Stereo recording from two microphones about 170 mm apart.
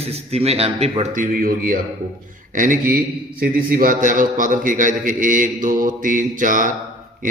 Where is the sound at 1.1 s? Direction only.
55° right (ahead or behind).